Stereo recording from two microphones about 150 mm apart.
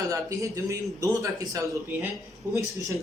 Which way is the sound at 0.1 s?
20° right (ahead or behind).